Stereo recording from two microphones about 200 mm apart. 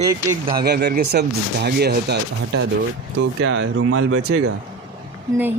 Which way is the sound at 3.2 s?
70° right (ahead or behind).